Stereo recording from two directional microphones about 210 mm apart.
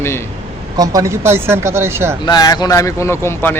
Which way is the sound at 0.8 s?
15° right (ahead or behind).